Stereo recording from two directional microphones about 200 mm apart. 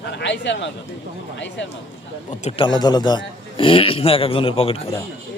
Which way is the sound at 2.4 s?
25° left (ahead or behind).